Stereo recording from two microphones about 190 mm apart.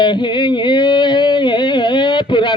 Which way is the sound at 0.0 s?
25° left (ahead or behind).